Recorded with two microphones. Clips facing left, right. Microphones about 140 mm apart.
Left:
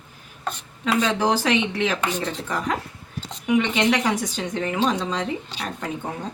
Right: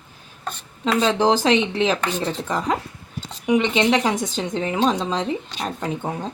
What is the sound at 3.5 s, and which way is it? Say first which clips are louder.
A woman's voice: right 2 dB; 20° right (ahead or behind).